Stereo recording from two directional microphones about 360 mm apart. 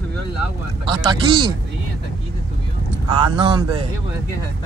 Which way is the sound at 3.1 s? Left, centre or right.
Centre.